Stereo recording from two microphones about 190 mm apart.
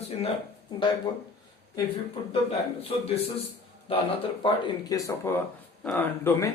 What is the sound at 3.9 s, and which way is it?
Speech, 30° left (ahead or behind).